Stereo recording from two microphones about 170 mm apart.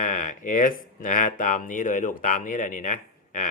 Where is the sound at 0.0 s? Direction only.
50° left (ahead or behind).